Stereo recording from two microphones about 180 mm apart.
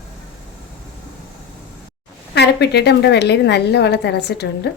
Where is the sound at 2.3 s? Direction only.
70° left (ahead or behind).